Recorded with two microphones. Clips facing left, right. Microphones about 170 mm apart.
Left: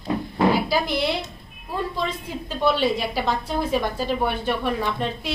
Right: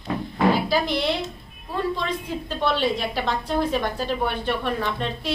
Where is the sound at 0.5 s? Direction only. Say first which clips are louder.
Even; 10° left (ahead or behind).